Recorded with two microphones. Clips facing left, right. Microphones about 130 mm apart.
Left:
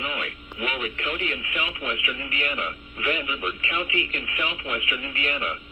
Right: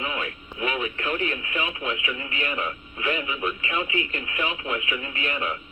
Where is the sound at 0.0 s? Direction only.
30° right (ahead or behind).